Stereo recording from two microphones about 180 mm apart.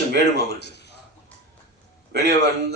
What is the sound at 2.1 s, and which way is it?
Speech, 65° right (ahead or behind).